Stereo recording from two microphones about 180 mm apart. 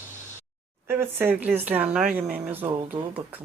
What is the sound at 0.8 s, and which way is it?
Speech, 10° right (ahead or behind).